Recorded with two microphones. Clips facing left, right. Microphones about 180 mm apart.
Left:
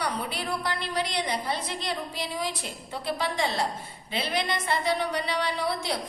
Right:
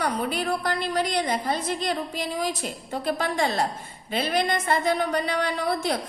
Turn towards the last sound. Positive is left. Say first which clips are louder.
# right 3 dB
turn(degrees=-50)  # may be behind; listen again after turning